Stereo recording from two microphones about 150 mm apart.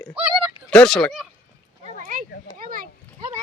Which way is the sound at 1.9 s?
65° right (ahead or behind).